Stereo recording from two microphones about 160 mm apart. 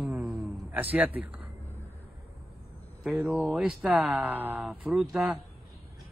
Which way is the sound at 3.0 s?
5° right (ahead or behind).